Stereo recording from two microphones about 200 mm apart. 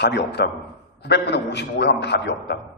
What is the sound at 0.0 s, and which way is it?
A man's voice, 60° left (ahead or behind).